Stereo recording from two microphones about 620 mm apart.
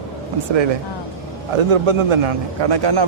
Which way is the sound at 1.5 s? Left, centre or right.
Right.